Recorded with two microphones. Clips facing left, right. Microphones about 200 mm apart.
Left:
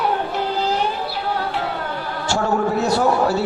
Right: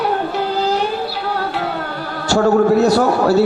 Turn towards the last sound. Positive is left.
turn(degrees=-40)  # may be behind; listen again after turning